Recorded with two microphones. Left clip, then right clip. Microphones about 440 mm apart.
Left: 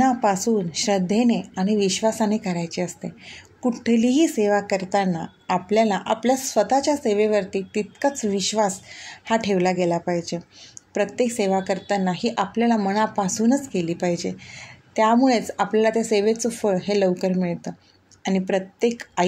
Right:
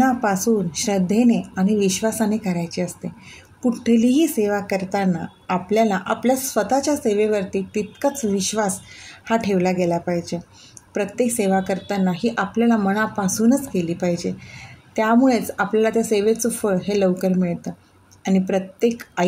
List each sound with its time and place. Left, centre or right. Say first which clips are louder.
0.0 s speech: even; right